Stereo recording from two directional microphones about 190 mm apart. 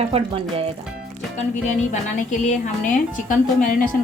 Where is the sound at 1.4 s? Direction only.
40° left (ahead or behind).